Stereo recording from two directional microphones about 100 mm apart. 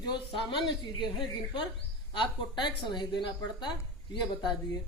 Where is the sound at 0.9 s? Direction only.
50° left (ahead or behind).